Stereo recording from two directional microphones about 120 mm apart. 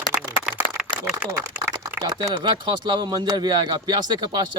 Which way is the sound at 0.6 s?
40° left (ahead or behind).